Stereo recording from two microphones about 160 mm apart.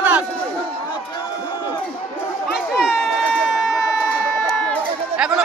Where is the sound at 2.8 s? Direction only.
Centre (ahead or behind).